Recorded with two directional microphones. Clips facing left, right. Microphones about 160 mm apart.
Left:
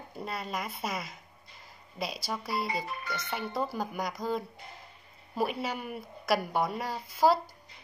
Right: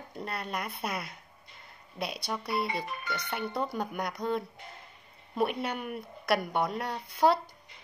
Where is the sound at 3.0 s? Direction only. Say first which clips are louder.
Right 1 dB; 25° left (ahead or behind).